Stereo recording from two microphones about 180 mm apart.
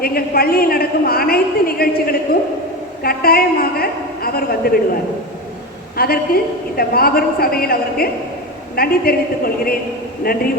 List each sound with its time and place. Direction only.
0.0 s a woman's voice: 55° left (ahead or behind)
6.0 s a woman's voice: 55° left (ahead or behind)